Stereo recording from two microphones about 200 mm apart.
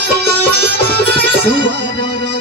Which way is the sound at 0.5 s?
55° right (ahead or behind).